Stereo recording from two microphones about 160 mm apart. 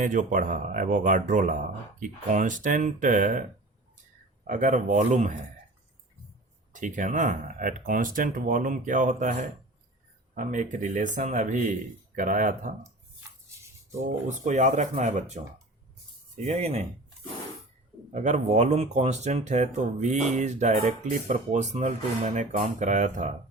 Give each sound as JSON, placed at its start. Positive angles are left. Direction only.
{"t": 0.0, "sound": "speech", "side_deg": -55}
{"t": 4.4, "sound": "speech", "side_deg": -55}
{"t": 6.7, "sound": "speech", "side_deg": -55}
{"t": 10.3, "sound": "speech", "side_deg": -55}
{"t": 14.0, "sound": "speech", "side_deg": -50}
{"t": 16.5, "sound": "speech", "side_deg": -40}
{"t": 18.1, "sound": "speech", "side_deg": -45}